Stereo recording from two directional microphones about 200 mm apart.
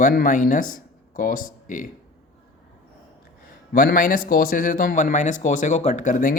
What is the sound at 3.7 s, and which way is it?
Speech, 45° left (ahead or behind).